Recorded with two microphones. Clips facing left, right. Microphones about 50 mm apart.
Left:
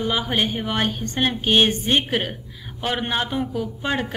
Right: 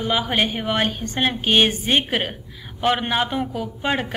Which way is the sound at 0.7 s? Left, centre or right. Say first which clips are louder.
Right 1 dB; right.